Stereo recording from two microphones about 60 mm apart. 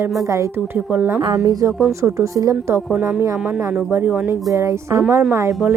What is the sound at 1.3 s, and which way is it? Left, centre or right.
Speech, right.